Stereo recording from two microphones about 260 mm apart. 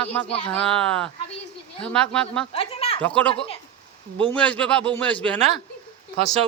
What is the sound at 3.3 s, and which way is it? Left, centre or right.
Speech, left.